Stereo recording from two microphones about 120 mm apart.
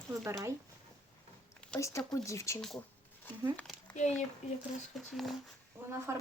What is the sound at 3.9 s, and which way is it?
Speech, 70° left (ahead or behind).